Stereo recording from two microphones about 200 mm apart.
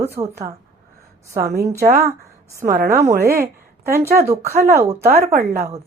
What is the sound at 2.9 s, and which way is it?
A woman's voice, 15° right (ahead or behind).